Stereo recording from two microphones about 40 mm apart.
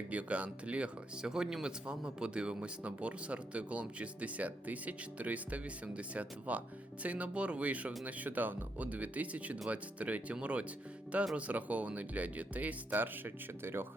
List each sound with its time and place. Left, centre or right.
0.1 s speech: right
1.2 s speech: centre; by 13.3 s right
13.6 s speech: right